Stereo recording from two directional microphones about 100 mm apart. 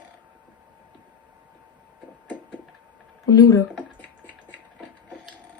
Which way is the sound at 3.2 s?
40° left (ahead or behind).